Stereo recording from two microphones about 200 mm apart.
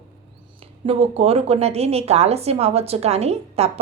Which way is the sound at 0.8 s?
30° right (ahead or behind).